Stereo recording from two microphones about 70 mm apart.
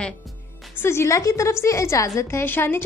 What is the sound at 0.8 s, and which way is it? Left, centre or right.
A woman's voice, left.